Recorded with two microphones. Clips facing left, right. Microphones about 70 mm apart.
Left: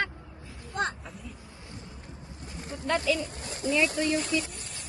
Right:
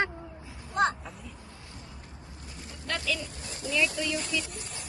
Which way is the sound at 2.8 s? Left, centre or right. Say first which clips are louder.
Left 6 dB; centre.